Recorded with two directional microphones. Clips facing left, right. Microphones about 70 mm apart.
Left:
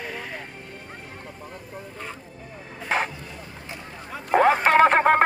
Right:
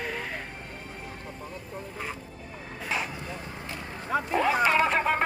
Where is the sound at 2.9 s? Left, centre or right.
Left.